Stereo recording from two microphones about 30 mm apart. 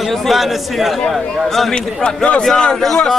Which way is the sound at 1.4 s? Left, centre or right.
Centre.